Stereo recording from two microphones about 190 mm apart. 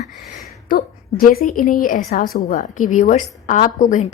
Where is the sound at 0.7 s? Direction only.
50° left (ahead or behind).